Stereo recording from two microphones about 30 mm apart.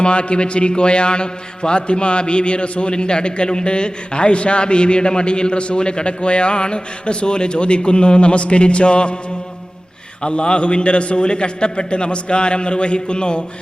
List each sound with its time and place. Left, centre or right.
0.0 s a man's voice: left
10.2 s a man's voice: left